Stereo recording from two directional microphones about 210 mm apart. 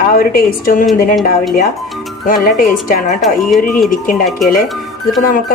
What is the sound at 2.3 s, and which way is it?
Speech, 40° left (ahead or behind).